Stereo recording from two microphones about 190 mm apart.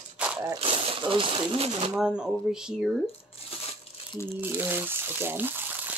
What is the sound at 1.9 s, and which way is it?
Speech, 5° right (ahead or behind).